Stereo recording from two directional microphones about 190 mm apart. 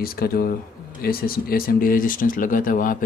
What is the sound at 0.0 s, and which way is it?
Speech, 50° left (ahead or behind).